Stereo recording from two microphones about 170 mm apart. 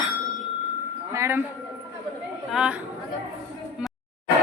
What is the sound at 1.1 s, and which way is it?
Speech, 15° right (ahead or behind).